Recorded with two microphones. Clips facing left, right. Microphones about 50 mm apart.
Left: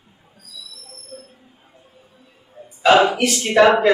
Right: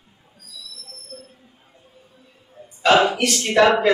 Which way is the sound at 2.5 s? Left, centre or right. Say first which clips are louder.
Left 2 dB; centre.